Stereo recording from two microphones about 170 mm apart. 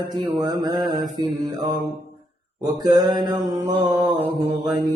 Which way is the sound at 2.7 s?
25° right (ahead or behind).